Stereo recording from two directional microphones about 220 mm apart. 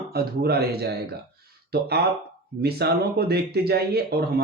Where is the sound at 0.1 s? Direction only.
45° right (ahead or behind).